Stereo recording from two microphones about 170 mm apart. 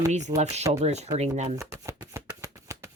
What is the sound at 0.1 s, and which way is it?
Speech, 45° right (ahead or behind).